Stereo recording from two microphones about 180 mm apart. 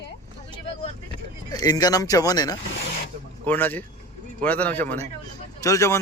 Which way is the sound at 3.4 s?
10° left (ahead or behind).